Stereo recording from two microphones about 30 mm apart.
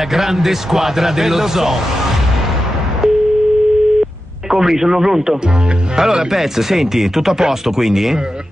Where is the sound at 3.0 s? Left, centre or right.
Centre.